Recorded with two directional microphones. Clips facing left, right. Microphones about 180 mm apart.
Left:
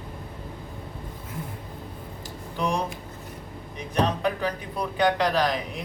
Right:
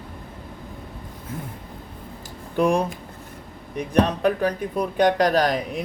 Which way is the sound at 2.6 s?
55° right (ahead or behind).